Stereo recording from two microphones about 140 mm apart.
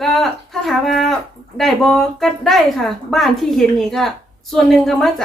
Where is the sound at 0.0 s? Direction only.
Centre (ahead or behind).